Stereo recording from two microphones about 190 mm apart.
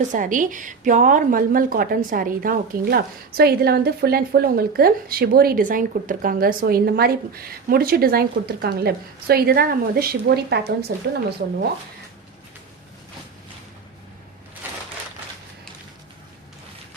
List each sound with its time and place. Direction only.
0.1 s a woman's voice: 45° right (ahead or behind); by 11.3 s 60° right (ahead or behind)